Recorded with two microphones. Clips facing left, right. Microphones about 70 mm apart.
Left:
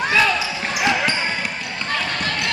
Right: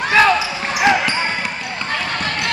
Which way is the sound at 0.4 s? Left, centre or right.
Centre.